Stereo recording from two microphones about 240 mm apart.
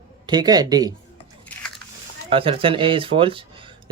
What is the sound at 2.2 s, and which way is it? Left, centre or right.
Speech, right.